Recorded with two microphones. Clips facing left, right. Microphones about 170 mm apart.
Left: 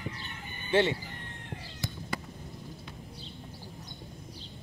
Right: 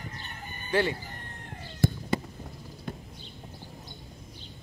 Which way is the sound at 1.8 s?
50° right (ahead or behind).